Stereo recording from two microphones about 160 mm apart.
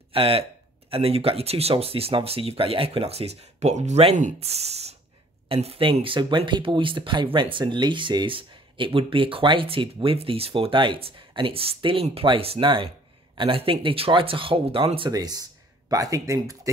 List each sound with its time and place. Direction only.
0.1 s speech: 35° right (ahead or behind)